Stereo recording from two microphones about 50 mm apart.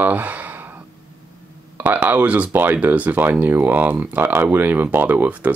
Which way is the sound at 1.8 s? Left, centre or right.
Right.